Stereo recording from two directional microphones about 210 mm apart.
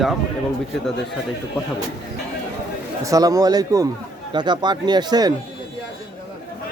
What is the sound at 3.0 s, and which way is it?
A man's voice, 15° right (ahead or behind).